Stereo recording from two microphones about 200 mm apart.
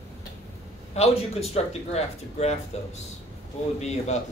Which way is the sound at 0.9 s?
30° left (ahead or behind).